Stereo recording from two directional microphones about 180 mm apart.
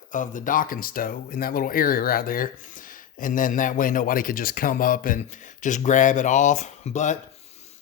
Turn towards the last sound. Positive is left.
turn(degrees=35)  # may be behind; listen again after turning